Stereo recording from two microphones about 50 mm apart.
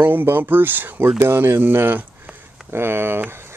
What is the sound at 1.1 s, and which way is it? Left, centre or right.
Speech, right.